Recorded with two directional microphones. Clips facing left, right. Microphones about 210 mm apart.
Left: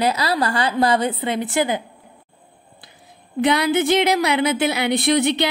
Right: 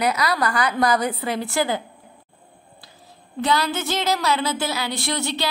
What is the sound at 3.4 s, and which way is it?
A woman's voice, 15° left (ahead or behind).